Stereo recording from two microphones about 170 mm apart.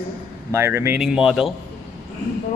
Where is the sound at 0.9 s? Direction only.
5° right (ahead or behind).